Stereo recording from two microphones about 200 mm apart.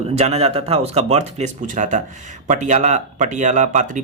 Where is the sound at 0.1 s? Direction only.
30° right (ahead or behind).